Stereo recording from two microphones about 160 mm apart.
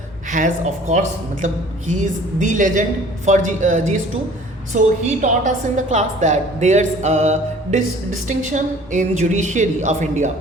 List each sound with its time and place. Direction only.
0.3 s a woman's voice: 50° right (ahead or behind)